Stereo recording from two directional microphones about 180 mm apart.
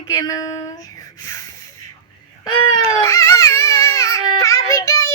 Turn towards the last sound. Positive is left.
turn(degrees=20)  # may be behind; listen again after turning